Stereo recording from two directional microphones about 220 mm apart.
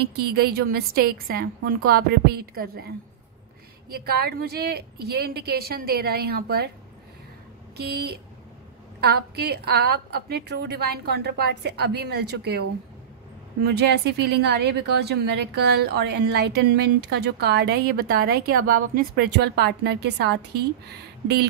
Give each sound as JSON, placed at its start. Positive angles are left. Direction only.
{"t": 0.1, "sound": "a woman's voice", "side_deg": -45}
{"t": 3.9, "sound": "a woman's voice", "side_deg": -45}
{"t": 7.7, "sound": "a woman's voice", "side_deg": -45}
{"t": 13.7, "sound": "a woman's voice", "side_deg": -50}